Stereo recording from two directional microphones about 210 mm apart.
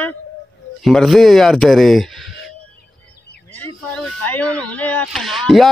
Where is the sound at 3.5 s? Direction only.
5° left (ahead or behind).